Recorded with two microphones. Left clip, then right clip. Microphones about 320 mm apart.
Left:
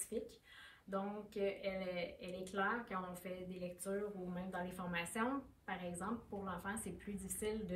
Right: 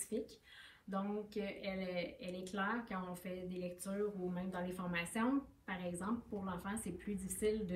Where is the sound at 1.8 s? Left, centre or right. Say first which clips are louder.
Right 1 dB; centre.